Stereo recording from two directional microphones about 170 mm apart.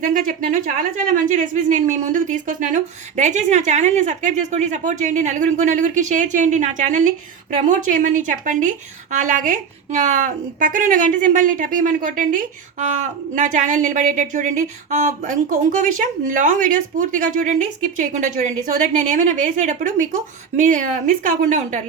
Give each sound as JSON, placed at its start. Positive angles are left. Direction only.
{"t": 0.0, "sound": "speech", "side_deg": -50}